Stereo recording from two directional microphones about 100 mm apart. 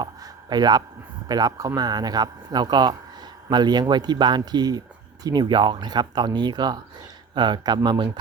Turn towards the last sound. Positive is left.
turn(degrees=-45)  # may be behind; listen again after turning